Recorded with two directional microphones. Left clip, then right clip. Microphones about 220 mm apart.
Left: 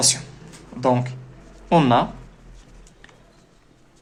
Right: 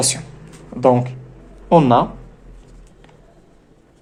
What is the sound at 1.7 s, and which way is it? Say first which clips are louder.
Speech: right 4 dB; 10° right (ahead or behind).